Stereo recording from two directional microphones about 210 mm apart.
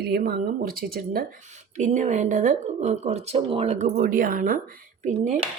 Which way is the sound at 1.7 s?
35° right (ahead or behind).